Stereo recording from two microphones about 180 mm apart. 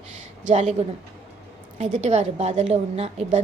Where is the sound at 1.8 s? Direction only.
40° right (ahead or behind).